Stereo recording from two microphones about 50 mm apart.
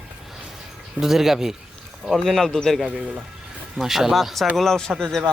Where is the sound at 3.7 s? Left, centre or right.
Centre.